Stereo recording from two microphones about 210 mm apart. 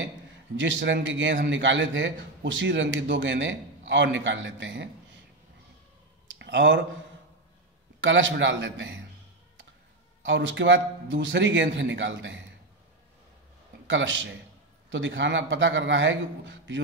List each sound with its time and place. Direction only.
0.6 s a man's voice: 60° right (ahead or behind)
6.2 s a sound: 55° right (ahead or behind)
8.0 s a man's voice: 60° right (ahead or behind)
10.2 s a man's voice: 60° right (ahead or behind)
13.8 s a man's voice: 65° right (ahead or behind)